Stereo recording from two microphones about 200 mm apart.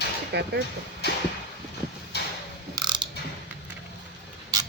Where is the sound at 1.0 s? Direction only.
55° left (ahead or behind).